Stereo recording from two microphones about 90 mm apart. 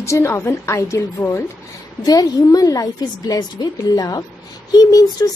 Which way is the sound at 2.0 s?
45° left (ahead or behind).